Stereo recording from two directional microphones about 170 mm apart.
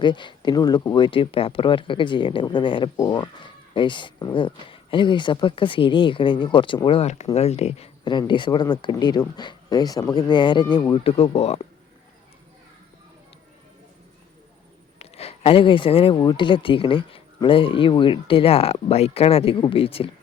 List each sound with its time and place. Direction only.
0.0 s speech: 25° left (ahead or behind)
8.0 s speech: 25° left (ahead or behind)
14.9 s speech: 35° left (ahead or behind)